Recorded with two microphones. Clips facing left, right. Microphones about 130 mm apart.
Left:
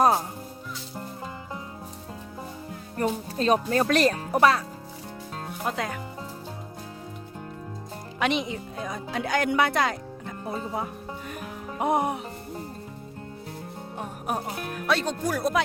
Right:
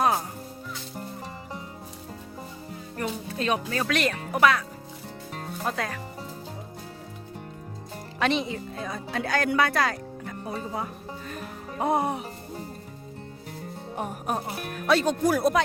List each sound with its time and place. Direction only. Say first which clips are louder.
3.0 s speech: left 4 dB; 35° left (ahead or behind)
5.6 s speech: left 1 dB; 20° left (ahead or behind)
8.2 s speech: right 1 dB; 15° left (ahead or behind)
11.3 s music: left 1 dB; 15° left (ahead or behind)
14.8 s speech: right 4 dB; 5° right (ahead or behind)